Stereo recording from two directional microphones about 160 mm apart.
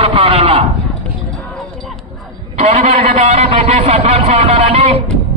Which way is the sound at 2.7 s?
40° right (ahead or behind).